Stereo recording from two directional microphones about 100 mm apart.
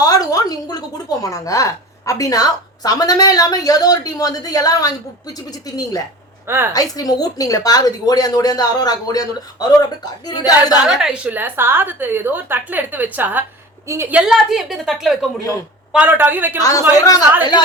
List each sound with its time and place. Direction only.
0.0 s a woman's voice: 40° left (ahead or behind)
6.5 s a woman's voice: 25° right (ahead or behind)
6.9 s speech: 40° left (ahead or behind)
10.8 s a woman's voice: 5° right (ahead or behind)
13.8 s a woman's voice: 30° right (ahead or behind)
14.1 s a woman's voice: 10° right (ahead or behind)
15.9 s a woman's voice: 15° right (ahead or behind)
16.6 s speech: 35° left (ahead or behind)